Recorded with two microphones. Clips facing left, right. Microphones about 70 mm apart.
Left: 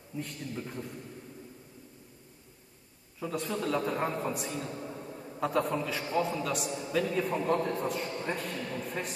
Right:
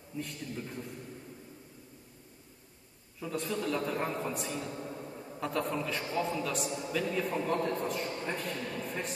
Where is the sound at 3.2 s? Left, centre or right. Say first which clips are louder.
Left 1 dB; centre.